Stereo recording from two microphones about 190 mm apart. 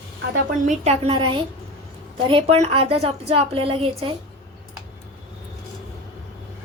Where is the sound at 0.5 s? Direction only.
40° right (ahead or behind).